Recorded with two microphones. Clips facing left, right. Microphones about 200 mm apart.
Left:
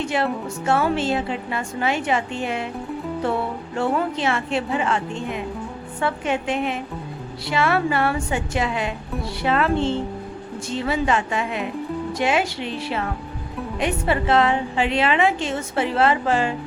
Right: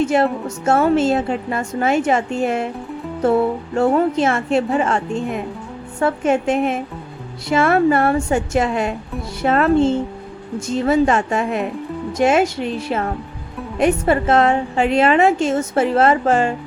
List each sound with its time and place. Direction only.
0.1 s a woman's voice: 45° right (ahead or behind)
3.8 s a woman's voice: 45° right (ahead or behind)